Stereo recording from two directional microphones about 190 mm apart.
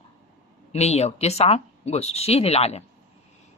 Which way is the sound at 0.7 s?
35° left (ahead or behind).